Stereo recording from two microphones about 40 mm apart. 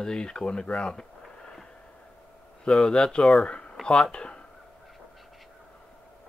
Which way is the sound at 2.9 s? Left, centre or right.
Centre.